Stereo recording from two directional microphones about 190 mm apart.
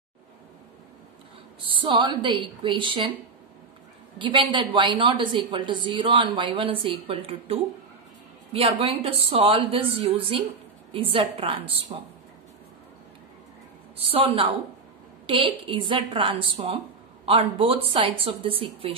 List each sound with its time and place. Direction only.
1.7 s a woman's voice: 25° right (ahead or behind)
4.2 s a woman's voice: 25° right (ahead or behind)
13.9 s a woman's voice: 30° right (ahead or behind)